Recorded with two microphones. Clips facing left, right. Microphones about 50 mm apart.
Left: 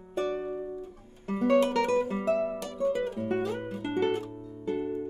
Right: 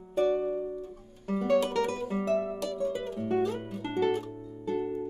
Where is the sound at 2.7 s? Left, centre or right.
Centre.